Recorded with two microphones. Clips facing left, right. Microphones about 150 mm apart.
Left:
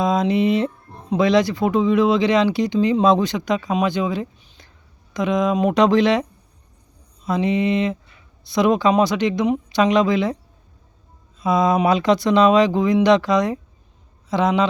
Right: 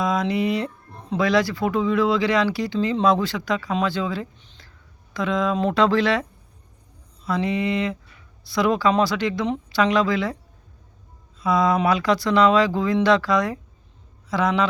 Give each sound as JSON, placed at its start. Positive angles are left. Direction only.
{"t": 0.0, "sound": "a sound", "side_deg": 25}
{"t": 1.1, "sound": "speech", "side_deg": 20}
{"t": 7.3, "sound": "speech", "side_deg": 20}
{"t": 11.3, "sound": "speech", "side_deg": 20}